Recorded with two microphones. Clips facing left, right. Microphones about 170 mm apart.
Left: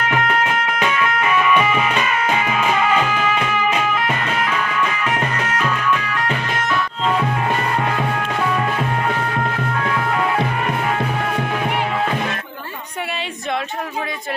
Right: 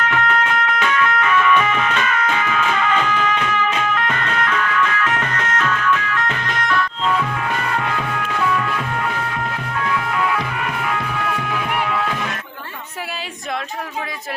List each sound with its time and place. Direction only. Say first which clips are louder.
0.1 s music: even; 10° left (ahead or behind)
7.9 s music: left 2 dB; 30° left (ahead or behind)